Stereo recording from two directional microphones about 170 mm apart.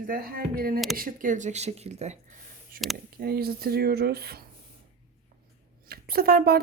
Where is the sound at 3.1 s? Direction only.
65° right (ahead or behind).